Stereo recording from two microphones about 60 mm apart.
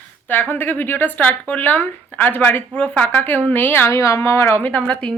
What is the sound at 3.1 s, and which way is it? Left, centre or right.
Speech, left.